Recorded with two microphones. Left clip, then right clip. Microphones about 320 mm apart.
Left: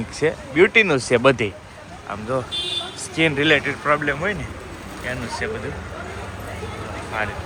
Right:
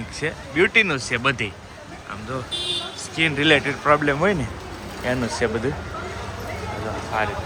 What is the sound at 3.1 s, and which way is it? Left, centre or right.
Speech, centre.